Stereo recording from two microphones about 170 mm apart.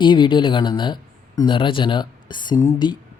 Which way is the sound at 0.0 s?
30° left (ahead or behind).